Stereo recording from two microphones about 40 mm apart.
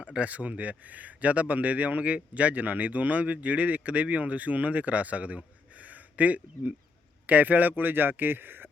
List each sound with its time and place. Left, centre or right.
0.0 s speech: right
5.7 s a sound: right
7.3 s a man's voice: right